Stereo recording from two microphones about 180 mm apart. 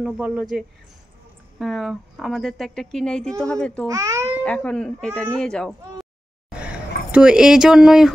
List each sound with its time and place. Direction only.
0.0 s speech: 5° right (ahead or behind)
3.8 s babbling: 20° right (ahead or behind)
4.4 s speech: 5° left (ahead or behind)